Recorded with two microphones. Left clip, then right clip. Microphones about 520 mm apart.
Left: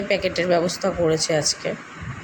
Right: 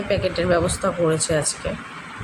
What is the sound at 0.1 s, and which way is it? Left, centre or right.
Speech, right.